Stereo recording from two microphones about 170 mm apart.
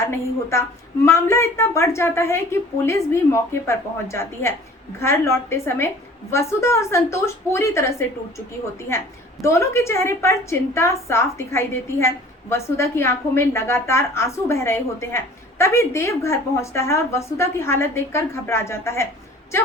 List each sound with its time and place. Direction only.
0.0 s a woman's voice: 15° left (ahead or behind)
9.4 s a woman's voice: 15° left (ahead or behind)